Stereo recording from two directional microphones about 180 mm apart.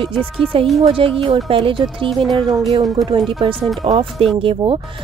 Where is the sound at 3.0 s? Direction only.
25° right (ahead or behind).